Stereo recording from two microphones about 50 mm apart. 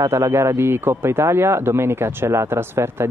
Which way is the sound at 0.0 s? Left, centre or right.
Right.